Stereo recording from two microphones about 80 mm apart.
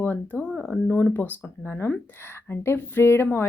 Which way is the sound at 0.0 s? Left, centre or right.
Left.